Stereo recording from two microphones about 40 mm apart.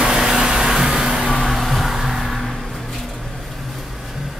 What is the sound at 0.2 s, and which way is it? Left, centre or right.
Vehicle, centre.